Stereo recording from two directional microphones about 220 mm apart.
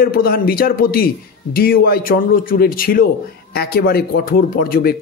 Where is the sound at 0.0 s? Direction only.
40° left (ahead or behind).